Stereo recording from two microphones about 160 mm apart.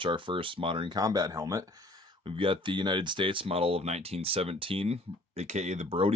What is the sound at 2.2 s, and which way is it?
Speech, 35° right (ahead or behind).